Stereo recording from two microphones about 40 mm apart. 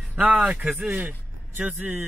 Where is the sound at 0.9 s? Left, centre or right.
Right.